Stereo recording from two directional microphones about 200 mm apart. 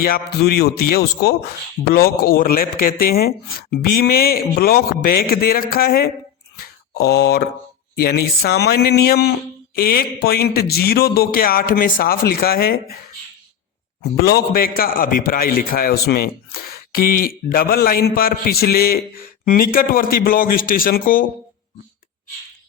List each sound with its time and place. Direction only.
0.0 s a man's voice: 50° left (ahead or behind)
6.6 s a sound: 55° left (ahead or behind)
7.9 s a man's voice: 50° left (ahead or behind)
14.2 s a man's voice: 50° left (ahead or behind)